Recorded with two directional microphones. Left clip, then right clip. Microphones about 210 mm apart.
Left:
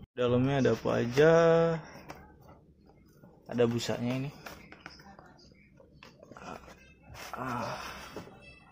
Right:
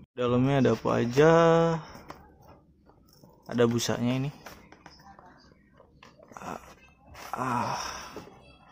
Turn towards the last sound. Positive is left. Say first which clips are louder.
# right 6 dB
turn(degrees=-20)  # may be behind; listen again after turning